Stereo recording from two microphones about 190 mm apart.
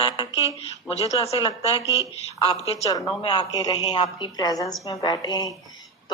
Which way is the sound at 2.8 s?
20° left (ahead or behind).